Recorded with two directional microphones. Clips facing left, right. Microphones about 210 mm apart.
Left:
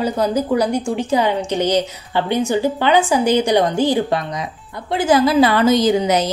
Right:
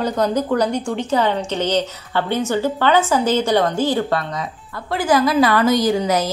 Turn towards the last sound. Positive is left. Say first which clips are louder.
# left 2 dB
turn(degrees=20)  # may be behind; listen again after turning